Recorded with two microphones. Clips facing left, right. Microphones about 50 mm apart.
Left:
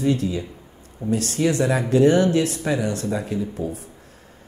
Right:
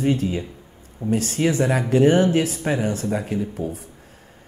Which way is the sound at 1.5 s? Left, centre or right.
Right.